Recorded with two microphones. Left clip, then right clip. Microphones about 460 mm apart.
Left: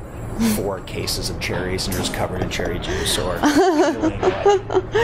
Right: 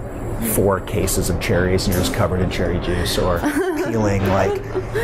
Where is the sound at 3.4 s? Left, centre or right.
Left.